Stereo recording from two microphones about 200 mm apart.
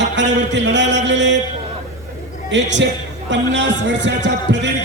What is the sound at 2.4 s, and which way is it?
A man's voice, 65° right (ahead or behind).